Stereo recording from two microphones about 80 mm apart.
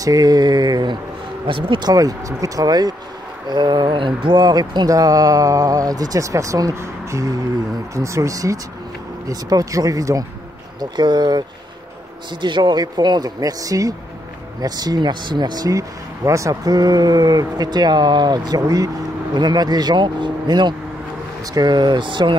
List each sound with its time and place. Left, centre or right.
0.0 s speech: right
1.5 s speech: right
3.4 s speech: right
10.8 s speech: right
12.3 s speech: right
13.4 s speech: right
16.3 s speech: right
16.6 s speech: right